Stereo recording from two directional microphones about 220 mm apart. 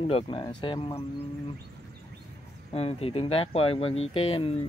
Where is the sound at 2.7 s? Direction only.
25° left (ahead or behind).